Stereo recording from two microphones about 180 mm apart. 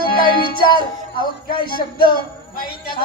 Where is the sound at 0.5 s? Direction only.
25° left (ahead or behind).